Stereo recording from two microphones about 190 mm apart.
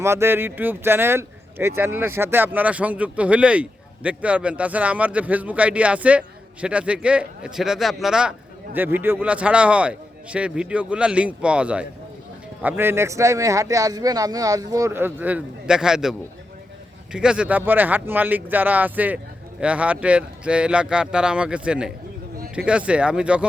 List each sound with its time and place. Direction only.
0.0 s speech: 15° right (ahead or behind)